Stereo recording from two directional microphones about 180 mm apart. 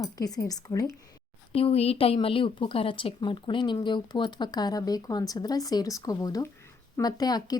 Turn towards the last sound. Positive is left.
turn(degrees=20)  # may be behind; listen again after turning